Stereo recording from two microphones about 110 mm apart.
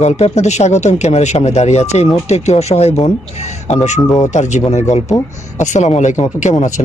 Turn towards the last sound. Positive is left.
turn(degrees=90)